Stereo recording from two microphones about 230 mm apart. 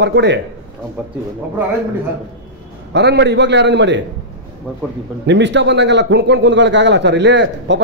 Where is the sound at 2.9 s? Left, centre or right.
Right.